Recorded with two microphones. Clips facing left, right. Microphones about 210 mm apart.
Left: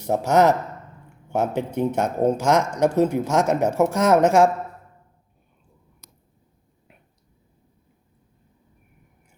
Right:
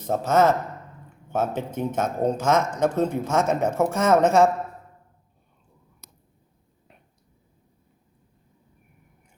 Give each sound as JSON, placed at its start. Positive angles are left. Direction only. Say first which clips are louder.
{"t": 0.0, "sound": "speech", "louder": "left 2 dB", "side_deg": 15}
{"t": 2.9, "sound": "speech", "louder": "left 4 dB", "side_deg": 70}
{"t": 3.2, "sound": "speech", "louder": "left 2 dB", "side_deg": 15}